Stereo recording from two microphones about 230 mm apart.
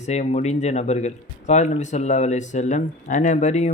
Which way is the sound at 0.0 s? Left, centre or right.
Left.